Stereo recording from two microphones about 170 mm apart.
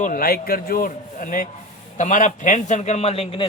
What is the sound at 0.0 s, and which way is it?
A man's voice, 55° left (ahead or behind).